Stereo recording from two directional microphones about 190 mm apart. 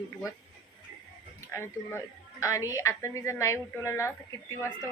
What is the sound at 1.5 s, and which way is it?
Speech, 15° left (ahead or behind).